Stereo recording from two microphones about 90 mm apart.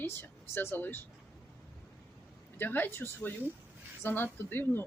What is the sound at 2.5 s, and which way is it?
Speech, 20° left (ahead or behind).